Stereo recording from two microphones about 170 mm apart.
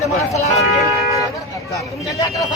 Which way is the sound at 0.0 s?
40° left (ahead or behind).